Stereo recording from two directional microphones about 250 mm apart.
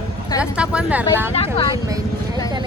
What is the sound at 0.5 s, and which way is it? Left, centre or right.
Speech, centre.